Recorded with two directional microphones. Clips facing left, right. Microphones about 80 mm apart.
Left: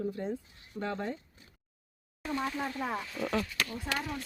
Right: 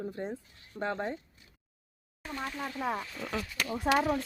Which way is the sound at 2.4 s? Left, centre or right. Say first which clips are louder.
Left 1 dB; centre.